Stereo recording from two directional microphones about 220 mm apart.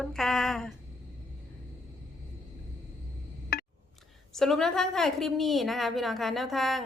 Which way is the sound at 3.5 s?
45° left (ahead or behind).